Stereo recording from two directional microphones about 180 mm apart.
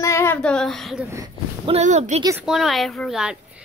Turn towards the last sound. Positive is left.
turn(degrees=0)  # may be behind; listen again after turning